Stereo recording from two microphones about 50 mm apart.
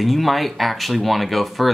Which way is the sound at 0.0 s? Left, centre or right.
Centre.